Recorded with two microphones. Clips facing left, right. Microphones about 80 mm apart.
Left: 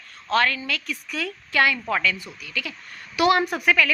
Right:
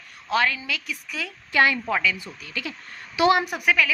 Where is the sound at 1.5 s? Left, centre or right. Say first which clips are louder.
Right 1 dB; right.